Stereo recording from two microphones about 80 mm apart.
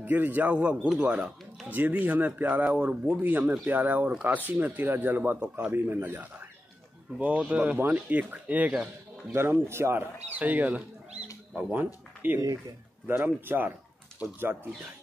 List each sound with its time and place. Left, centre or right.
0.0 s speech: right
9.3 s speech: right
10.3 s speech: right